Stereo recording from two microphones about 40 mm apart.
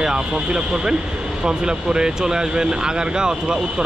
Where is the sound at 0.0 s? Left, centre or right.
Centre.